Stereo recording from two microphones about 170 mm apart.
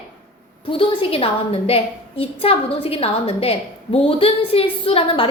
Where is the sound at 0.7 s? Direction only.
30° left (ahead or behind).